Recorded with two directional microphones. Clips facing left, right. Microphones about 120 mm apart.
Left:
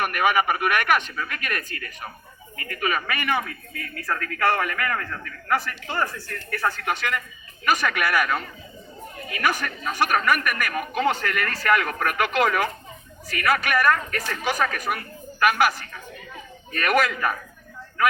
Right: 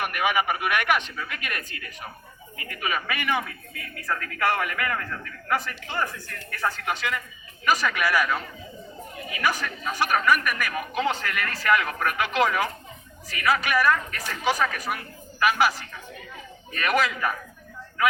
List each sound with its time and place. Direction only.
0.0 s speech: 50° left (ahead or behind)
3.8 s a man's voice: 15° right (ahead or behind)
6.5 s a woman's voice: 55° left (ahead or behind)
11.2 s a man's voice: 10° right (ahead or behind)
11.7 s a woman's voice: 55° left (ahead or behind)
16.7 s a woman's voice: 55° left (ahead or behind)